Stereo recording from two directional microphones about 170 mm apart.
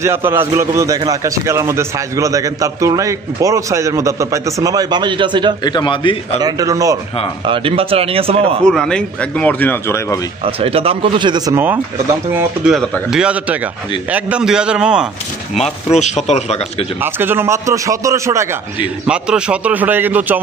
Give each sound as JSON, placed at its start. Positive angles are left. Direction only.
{"t": 0.0, "sound": "a man's voice", "side_deg": -15}
{"t": 5.6, "sound": "speech", "side_deg": 25}
{"t": 6.4, "sound": "a man's voice", "side_deg": -20}
{"t": 7.4, "sound": "a man's voice", "side_deg": -30}
{"t": 8.6, "sound": "speech", "side_deg": 5}
{"t": 10.4, "sound": "a man's voice", "side_deg": -35}
{"t": 12.7, "sound": "a man's voice", "side_deg": 0}
{"t": 15.5, "sound": "speech", "side_deg": 40}
{"t": 17.0, "sound": "a man's voice", "side_deg": -10}
{"t": 19.0, "sound": "a man's voice", "side_deg": -5}